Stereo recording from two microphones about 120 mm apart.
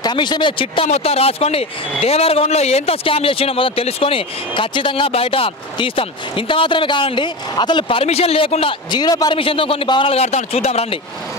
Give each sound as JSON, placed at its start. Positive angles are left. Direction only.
{"t": 0.0, "sound": "speech", "side_deg": 40}
{"t": 0.8, "sound": "speech", "side_deg": 60}
{"t": 9.4, "sound": "speech", "side_deg": 50}
{"t": 10.1, "sound": "speech", "side_deg": 60}